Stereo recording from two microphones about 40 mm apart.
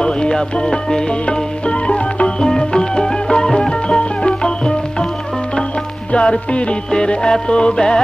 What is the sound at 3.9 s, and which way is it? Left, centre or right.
Music, left.